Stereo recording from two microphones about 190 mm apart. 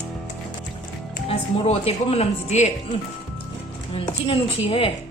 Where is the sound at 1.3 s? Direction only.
30° left (ahead or behind).